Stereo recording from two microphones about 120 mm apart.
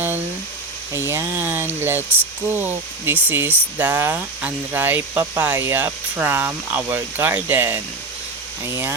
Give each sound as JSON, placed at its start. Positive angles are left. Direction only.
{"t": 0.9, "sound": "speech", "side_deg": -20}